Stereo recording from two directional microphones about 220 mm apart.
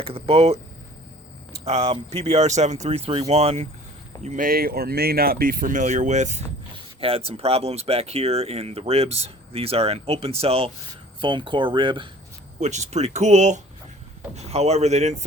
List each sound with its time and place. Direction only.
0.0 s speech: 25° right (ahead or behind)
12.5 s speech: 30° right (ahead or behind)